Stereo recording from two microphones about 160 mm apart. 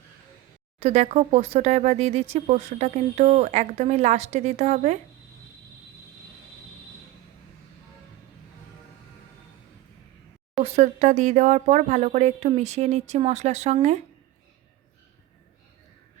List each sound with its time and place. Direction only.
0.8 s speech: 45° right (ahead or behind)
10.6 s speech: 40° right (ahead or behind)